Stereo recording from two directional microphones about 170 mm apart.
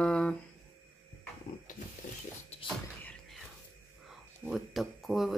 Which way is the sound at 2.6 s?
5° left (ahead or behind).